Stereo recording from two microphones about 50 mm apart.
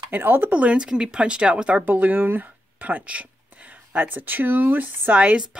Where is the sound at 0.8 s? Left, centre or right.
Centre.